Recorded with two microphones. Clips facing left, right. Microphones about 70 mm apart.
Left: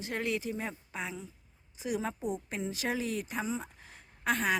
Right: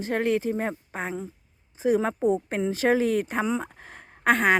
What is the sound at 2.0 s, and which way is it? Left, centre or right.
A woman's voice, right.